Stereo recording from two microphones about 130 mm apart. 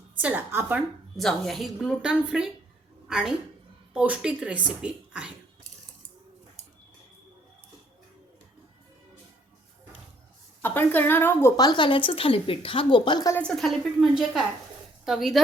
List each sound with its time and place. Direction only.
0.2 s a woman's voice: 10° right (ahead or behind)
1.1 s a woman's voice: centre (ahead or behind)
10.6 s a woman's voice: 15° left (ahead or behind)
11.5 s speech: 35° left (ahead or behind)
13.4 s a woman's voice: 5° left (ahead or behind)